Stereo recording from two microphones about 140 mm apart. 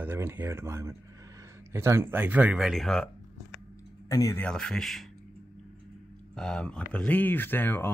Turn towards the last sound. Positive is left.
turn(degrees=15)  # may be behind; listen again after turning